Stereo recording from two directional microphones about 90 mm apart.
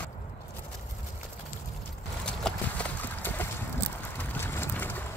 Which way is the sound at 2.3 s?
10° left (ahead or behind).